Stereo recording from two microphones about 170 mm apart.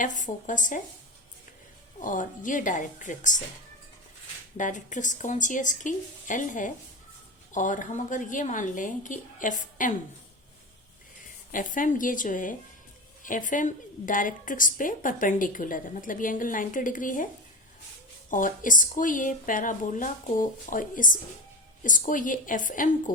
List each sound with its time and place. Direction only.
0.0 s a woman's voice: 50° left (ahead or behind)
2.0 s a woman's voice: 50° left (ahead or behind)
4.5 s a woman's voice: 45° left (ahead or behind)
11.5 s a woman's voice: 50° left (ahead or behind)
18.3 s a woman's voice: 50° left (ahead or behind)